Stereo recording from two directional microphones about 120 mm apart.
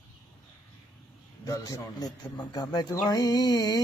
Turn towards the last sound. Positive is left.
turn(degrees=35)  # may be behind; listen again after turning